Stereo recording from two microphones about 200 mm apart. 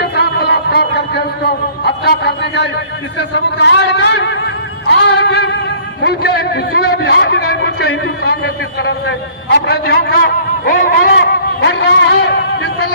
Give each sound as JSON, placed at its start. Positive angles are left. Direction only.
{"t": 0.2, "sound": "music", "side_deg": 55}
{"t": 1.8, "sound": "a sound", "side_deg": 55}
{"t": 3.2, "sound": "a man's voice", "side_deg": 60}
{"t": 4.9, "sound": "music", "side_deg": 60}
{"t": 6.0, "sound": "a man's voice", "side_deg": 55}